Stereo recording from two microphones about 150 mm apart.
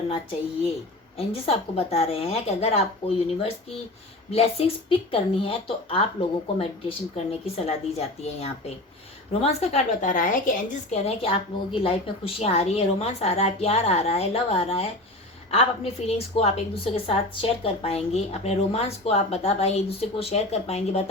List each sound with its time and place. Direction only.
1.1 s speech: 40° left (ahead or behind)
4.3 s a woman's voice: 40° left (ahead or behind); by 11.0 s 60° left (ahead or behind)
11.0 s a woman's voice: 40° left (ahead or behind)